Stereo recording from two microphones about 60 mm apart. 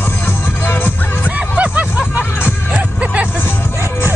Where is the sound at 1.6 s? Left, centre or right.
Right.